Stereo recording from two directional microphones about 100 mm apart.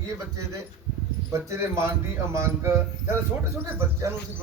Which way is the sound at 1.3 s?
30° right (ahead or behind).